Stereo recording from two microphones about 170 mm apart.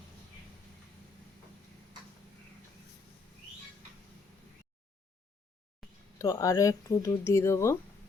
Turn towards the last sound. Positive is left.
turn(degrees=15)  # may be behind; listen again after turning